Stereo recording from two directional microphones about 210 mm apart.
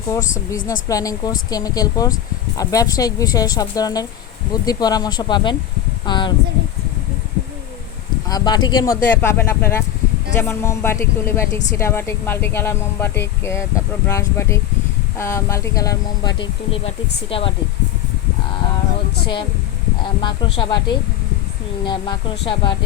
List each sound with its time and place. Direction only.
0.3 s speech: 15° left (ahead or behind)
8.3 s speech: 20° left (ahead or behind)
20.0 s speech: 20° left (ahead or behind)